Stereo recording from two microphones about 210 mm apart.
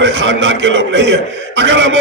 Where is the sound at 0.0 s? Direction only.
60° right (ahead or behind).